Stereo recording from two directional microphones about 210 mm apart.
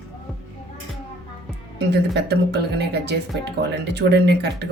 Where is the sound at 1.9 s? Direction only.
55° right (ahead or behind).